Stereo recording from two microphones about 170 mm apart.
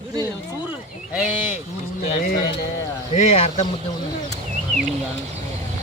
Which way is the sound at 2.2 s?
60° left (ahead or behind).